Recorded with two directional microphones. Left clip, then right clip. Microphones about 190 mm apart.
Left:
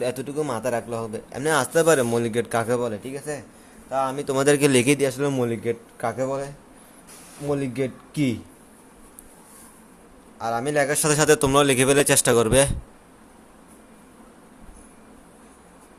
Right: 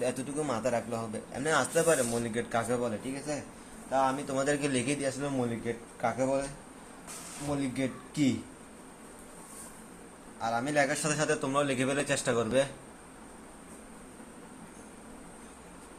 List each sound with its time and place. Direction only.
0.0 s a man's voice: 50° left (ahead or behind)
7.6 s speech: 65° left (ahead or behind)
10.3 s speech: 60° left (ahead or behind)